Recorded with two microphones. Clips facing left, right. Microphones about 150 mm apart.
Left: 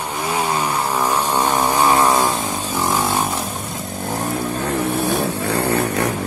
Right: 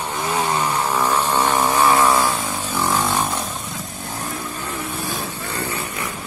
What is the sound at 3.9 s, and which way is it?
Vehicle, 50° left (ahead or behind).